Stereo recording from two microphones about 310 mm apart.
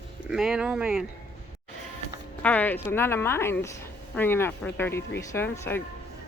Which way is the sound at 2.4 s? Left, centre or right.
Centre.